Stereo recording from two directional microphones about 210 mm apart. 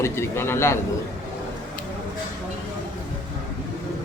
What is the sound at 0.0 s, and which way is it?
Speech, 10° left (ahead or behind).